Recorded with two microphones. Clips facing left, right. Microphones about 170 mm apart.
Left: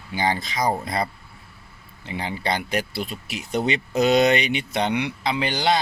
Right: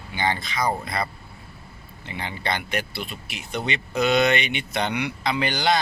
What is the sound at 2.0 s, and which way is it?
Speech, 35° left (ahead or behind).